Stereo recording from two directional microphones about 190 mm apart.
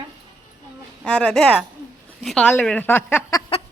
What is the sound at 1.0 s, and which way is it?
A woman's voice, 5° left (ahead or behind).